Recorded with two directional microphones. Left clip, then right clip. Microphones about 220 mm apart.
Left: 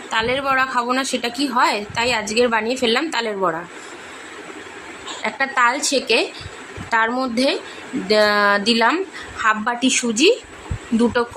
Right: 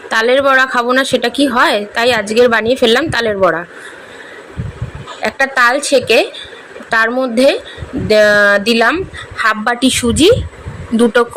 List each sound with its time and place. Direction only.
0.1 s a woman's voice: 20° right (ahead or behind)
5.2 s a woman's voice: 15° right (ahead or behind)